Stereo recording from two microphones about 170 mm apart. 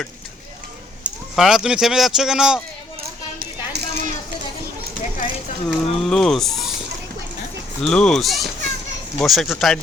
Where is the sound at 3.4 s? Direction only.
60° right (ahead or behind).